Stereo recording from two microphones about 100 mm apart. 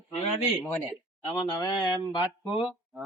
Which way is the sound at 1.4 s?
45° left (ahead or behind).